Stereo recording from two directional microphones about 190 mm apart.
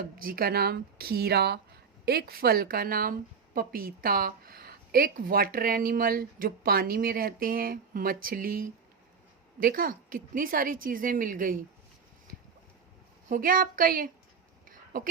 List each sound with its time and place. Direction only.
0.0 s a woman's voice: 50° right (ahead or behind)
13.2 s a woman's voice: 45° right (ahead or behind)
14.7 s a sound: 45° right (ahead or behind)